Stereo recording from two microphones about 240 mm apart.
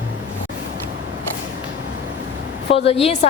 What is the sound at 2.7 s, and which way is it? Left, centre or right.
Speech, left.